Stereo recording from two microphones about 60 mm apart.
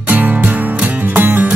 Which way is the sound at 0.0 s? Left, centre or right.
Right.